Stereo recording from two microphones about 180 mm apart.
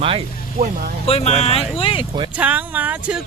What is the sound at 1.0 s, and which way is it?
Speech, 35° left (ahead or behind).